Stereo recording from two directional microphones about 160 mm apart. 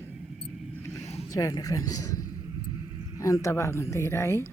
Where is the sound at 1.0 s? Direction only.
40° left (ahead or behind).